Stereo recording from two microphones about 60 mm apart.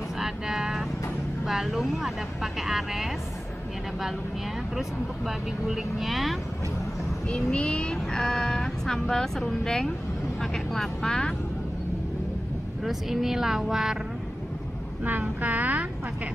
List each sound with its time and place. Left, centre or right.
0.2 s vehicle: centre
1.4 s speech: centre
4.7 s speech: centre
7.2 s speech: centre
12.8 s speech: centre
15.0 s speech: right